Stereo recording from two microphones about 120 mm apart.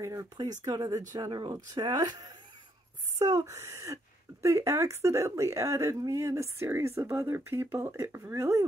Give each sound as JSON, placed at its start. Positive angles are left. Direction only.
{"t": 0.0, "sound": "speech", "side_deg": -25}